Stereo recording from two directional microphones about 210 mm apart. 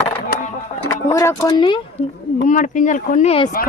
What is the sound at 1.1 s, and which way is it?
Speech, 15° left (ahead or behind).